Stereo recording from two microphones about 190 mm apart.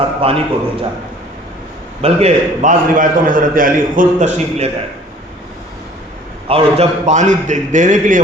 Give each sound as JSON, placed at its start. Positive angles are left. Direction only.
{"t": 0.0, "sound": "a man's voice", "side_deg": -30}
{"t": 2.0, "sound": "a man's voice", "side_deg": -30}
{"t": 6.5, "sound": "a man's voice", "side_deg": -35}